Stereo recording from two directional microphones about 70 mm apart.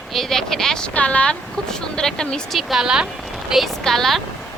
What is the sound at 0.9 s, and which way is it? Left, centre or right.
A woman's voice, centre.